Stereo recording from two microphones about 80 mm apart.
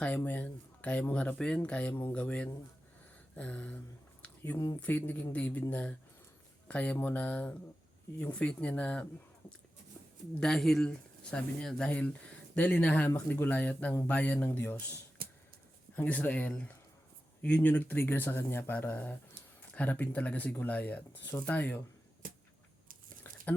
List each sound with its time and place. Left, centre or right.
0.0 s speech: left
1.9 s speech: left
2.1 s speech: centre
4.2 s a sound: centre
4.8 s speech: left
10.4 s speech: centre; by 14.9 s left
16.0 s speech: centre